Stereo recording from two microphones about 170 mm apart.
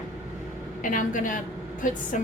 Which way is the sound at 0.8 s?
50° left (ahead or behind).